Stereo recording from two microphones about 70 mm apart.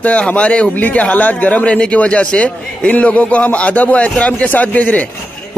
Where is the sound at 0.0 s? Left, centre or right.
Centre.